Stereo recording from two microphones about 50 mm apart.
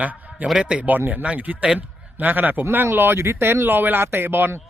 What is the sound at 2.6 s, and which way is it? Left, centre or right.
Speech, right.